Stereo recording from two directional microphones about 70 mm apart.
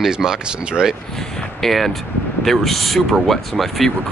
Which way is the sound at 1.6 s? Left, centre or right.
Centre.